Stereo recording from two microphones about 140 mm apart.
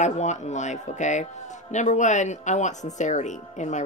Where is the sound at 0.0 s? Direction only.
55° left (ahead or behind).